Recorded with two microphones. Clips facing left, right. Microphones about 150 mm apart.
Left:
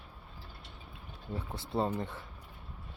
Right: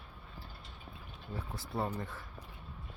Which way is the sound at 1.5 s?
25° left (ahead or behind).